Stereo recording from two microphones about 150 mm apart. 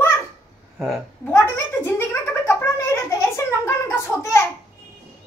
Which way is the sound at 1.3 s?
15° left (ahead or behind).